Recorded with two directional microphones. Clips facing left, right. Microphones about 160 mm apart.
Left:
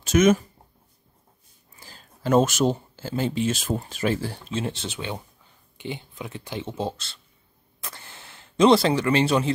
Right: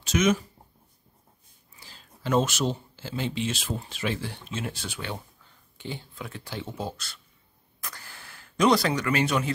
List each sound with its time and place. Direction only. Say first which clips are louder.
0.0 s speech: left 5 dB; 50° left (ahead or behind)
1.8 s speech: left 5 dB; 45° left (ahead or behind); by 9.5 s 30° left (ahead or behind)